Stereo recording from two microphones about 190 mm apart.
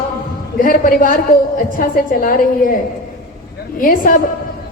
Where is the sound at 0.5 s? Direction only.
45° left (ahead or behind).